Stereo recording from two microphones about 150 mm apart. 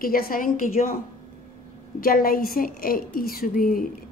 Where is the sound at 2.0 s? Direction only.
70° left (ahead or behind).